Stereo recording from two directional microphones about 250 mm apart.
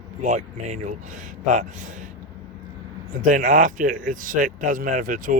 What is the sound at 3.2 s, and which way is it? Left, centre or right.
Speech, right.